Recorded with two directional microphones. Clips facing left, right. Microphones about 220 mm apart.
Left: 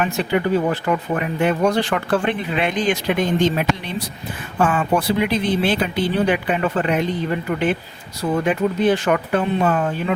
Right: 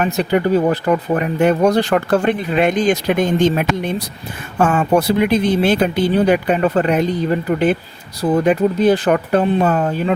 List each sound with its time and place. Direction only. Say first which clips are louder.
0.0 s speech: right 4 dB; 40° right (ahead or behind)